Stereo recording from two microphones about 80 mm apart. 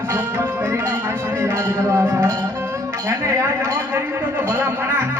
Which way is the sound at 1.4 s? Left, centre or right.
Right.